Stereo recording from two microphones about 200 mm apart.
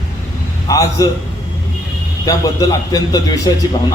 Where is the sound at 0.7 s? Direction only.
15° left (ahead or behind).